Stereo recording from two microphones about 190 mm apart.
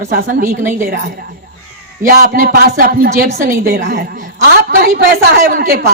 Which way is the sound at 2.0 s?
50° right (ahead or behind).